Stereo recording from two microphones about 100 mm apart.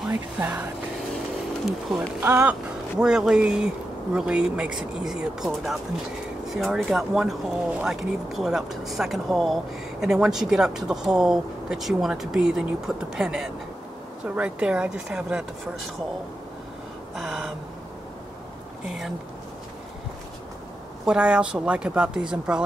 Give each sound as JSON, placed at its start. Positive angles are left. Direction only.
{"t": 0.1, "sound": "speech", "side_deg": -15}
{"t": 2.0, "sound": "speech", "side_deg": -20}
{"t": 3.0, "sound": "speech", "side_deg": -5}
{"t": 17.1, "sound": "speech", "side_deg": 0}
{"t": 18.9, "sound": "speech", "side_deg": -5}
{"t": 21.0, "sound": "speech", "side_deg": -10}